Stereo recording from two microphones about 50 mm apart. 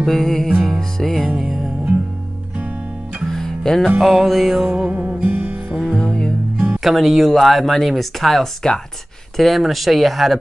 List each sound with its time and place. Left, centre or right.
0.0 s speech: centre
0.7 s music: centre
1.4 s music: centre
3.3 s music: centre
4.0 s speech: centre
4.7 s music: right
5.9 s music: left
6.8 s speech: centre